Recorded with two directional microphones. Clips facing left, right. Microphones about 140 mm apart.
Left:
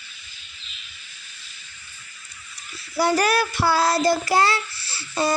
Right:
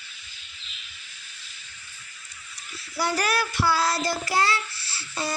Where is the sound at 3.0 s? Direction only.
50° left (ahead or behind).